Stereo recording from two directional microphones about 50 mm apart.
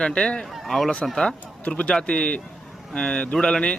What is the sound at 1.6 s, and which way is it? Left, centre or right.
Speech, left.